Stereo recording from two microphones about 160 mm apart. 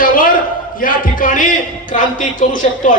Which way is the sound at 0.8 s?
60° left (ahead or behind).